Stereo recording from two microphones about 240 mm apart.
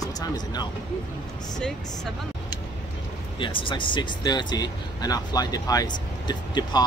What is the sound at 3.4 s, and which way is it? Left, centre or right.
Speech, left.